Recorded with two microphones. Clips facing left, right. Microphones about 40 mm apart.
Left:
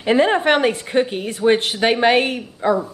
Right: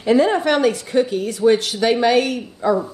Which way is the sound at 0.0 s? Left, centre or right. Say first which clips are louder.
Even; left.